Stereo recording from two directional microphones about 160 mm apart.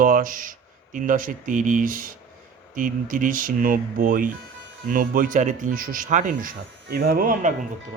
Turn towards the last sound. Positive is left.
turn(degrees=-65)  # may be behind; listen again after turning